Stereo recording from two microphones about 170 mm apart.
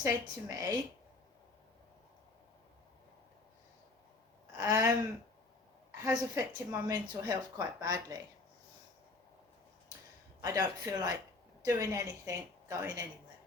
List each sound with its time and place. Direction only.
0.0 s speech: 20° right (ahead or behind)
4.5 s speech: 20° right (ahead or behind)
6.0 s speech: 20° right (ahead or behind)
10.4 s speech: 20° right (ahead or behind)